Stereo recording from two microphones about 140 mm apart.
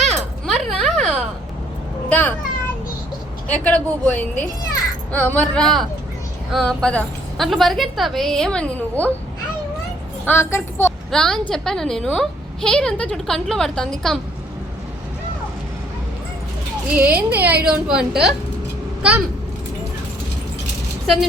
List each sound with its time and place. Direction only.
0.0 s a sound: centre (ahead or behind)
2.0 s a child's voice: 10° left (ahead or behind)
3.5 s a woman's voice: 10° left (ahead or behind)
10.2 s a woman's voice: 15° left (ahead or behind)
11.1 s a woman's voice: 5° left (ahead or behind)
16.9 s speech: 10° right (ahead or behind)